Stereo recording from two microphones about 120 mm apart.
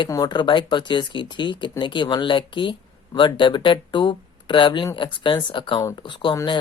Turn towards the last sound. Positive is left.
turn(degrees=45)  # may be behind; listen again after turning